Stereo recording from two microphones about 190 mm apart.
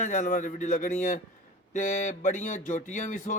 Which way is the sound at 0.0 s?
40° left (ahead or behind).